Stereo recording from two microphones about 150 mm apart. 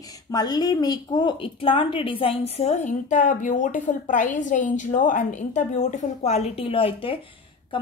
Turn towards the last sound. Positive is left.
turn(degrees=35)  # may be behind; listen again after turning